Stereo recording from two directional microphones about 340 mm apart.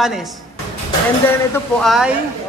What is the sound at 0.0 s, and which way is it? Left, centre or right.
Speech, centre.